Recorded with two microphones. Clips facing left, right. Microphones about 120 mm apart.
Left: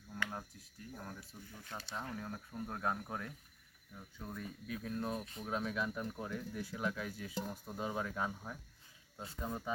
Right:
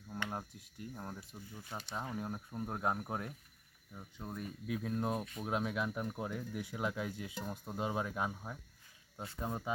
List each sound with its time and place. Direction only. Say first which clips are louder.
0.1 s speech: right 2 dB; 25° right (ahead or behind)
1.6 s speech: right 2 dB; 15° right (ahead or behind)